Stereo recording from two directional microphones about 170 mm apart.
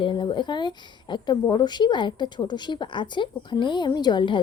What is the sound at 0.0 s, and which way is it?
Speech, 30° left (ahead or behind).